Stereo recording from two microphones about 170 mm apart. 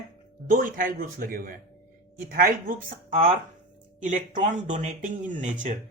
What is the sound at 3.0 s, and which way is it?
Speech, 35° right (ahead or behind).